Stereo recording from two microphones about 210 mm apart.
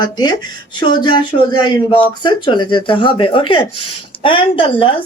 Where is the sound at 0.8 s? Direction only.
20° left (ahead or behind).